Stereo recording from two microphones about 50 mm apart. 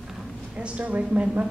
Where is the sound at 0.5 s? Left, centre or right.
Right.